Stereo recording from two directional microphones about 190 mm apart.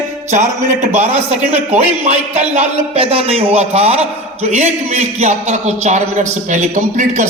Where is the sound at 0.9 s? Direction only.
35° right (ahead or behind).